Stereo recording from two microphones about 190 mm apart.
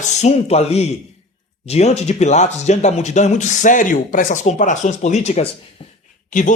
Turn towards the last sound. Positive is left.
turn(degrees=45)  # may be behind; listen again after turning